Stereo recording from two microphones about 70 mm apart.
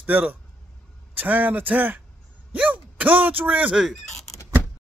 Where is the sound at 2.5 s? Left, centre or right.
Right.